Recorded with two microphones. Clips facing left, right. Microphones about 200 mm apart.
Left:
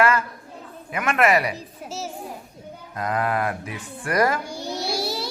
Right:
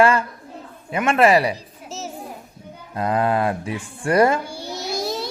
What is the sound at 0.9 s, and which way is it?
Speech, 25° right (ahead or behind).